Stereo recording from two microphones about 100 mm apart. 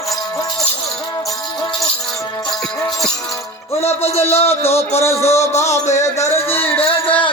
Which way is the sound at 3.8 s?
90° left.